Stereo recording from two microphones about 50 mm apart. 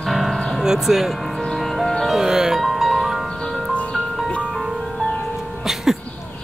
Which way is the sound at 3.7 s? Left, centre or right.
Left.